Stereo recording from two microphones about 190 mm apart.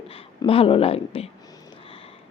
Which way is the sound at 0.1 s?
30° left (ahead or behind).